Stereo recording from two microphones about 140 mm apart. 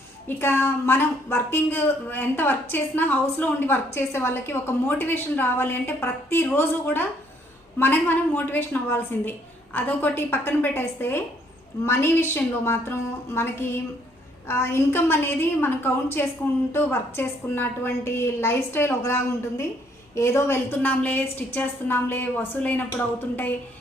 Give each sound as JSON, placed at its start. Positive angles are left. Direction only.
{"t": 0.3, "sound": "a woman's voice", "side_deg": 15}